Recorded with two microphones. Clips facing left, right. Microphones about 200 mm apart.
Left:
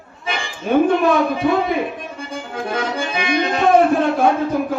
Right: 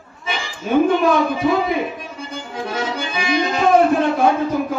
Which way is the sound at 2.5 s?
55° left (ahead or behind).